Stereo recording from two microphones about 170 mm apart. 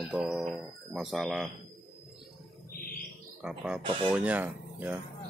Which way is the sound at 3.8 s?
30° right (ahead or behind).